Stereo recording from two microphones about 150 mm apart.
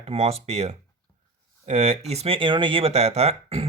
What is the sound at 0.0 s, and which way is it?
Speech, 40° right (ahead or behind).